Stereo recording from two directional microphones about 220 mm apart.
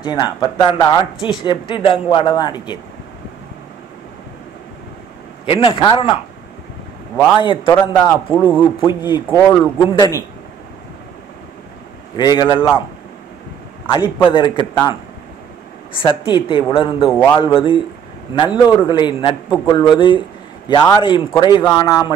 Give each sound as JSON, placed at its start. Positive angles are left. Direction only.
{"t": 0.0, "sound": "speech", "side_deg": 20}
{"t": 5.4, "sound": "speech", "side_deg": 25}
{"t": 7.2, "sound": "speech", "side_deg": 15}
{"t": 7.9, "sound": "a man's voice", "side_deg": 10}
{"t": 8.5, "sound": "speech", "side_deg": -5}
{"t": 9.0, "sound": "a man's voice", "side_deg": 15}
{"t": 12.2, "sound": "a man's voice", "side_deg": 20}
{"t": 13.8, "sound": "a man's voice", "side_deg": 20}
{"t": 16.0, "sound": "a man's voice", "side_deg": 25}